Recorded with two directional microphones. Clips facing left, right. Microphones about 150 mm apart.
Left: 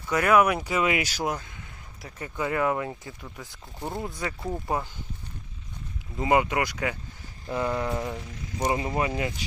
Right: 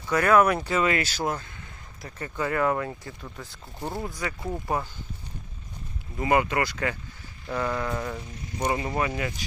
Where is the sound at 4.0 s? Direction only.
25° left (ahead or behind).